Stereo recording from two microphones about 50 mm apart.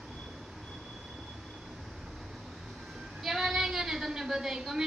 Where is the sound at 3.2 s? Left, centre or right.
Centre.